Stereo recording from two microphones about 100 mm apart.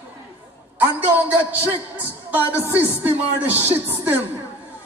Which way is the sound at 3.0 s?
20° right (ahead or behind).